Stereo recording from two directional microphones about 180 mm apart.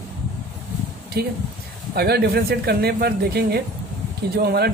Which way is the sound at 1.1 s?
60° right (ahead or behind).